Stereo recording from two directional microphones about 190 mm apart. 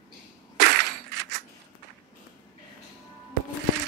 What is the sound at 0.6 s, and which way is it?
Cap gun, 60° right (ahead or behind).